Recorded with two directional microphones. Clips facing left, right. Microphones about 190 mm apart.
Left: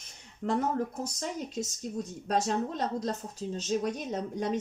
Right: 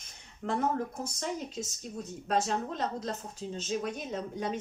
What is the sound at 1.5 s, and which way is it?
Speech, 40° left (ahead or behind).